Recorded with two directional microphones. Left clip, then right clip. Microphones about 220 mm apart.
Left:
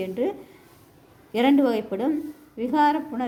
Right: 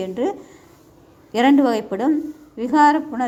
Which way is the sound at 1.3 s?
10° right (ahead or behind).